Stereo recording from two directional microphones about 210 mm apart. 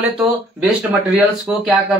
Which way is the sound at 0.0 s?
10° right (ahead or behind).